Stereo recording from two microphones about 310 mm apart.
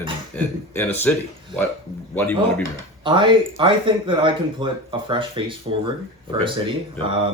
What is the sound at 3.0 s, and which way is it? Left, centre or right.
Speech, centre.